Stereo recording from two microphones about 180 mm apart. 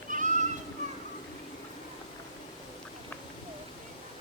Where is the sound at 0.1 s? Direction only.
45° right (ahead or behind).